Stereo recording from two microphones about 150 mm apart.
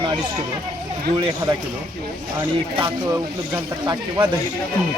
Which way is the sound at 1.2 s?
30° right (ahead or behind).